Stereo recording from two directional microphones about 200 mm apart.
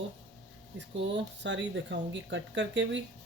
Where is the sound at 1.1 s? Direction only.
65° right (ahead or behind).